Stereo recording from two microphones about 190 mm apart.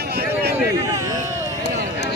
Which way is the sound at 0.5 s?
20° right (ahead or behind).